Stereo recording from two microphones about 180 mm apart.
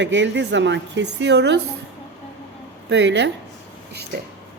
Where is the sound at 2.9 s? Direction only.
75° right (ahead or behind).